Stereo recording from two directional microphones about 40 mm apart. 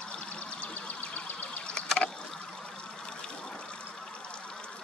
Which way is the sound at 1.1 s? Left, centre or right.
Left.